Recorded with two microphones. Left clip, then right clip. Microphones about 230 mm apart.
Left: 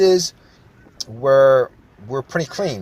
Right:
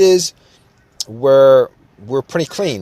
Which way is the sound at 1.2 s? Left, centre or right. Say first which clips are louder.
Right 4 dB; right.